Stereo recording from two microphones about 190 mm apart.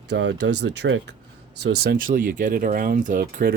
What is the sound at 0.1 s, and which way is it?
Speech, 65° right (ahead or behind).